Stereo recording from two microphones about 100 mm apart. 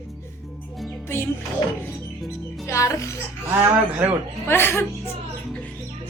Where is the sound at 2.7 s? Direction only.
30° left (ahead or behind).